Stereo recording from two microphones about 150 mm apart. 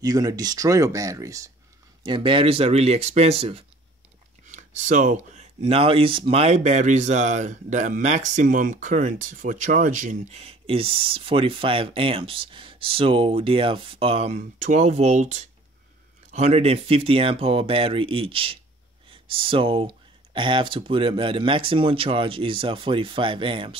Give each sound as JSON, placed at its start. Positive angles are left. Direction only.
{"t": 0.0, "sound": "speech", "side_deg": -25}
{"t": 2.0, "sound": "speech", "side_deg": -35}
{"t": 4.5, "sound": "speech", "side_deg": -55}